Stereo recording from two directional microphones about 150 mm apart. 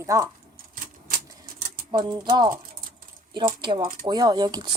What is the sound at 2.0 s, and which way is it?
Speech, 30° right (ahead or behind).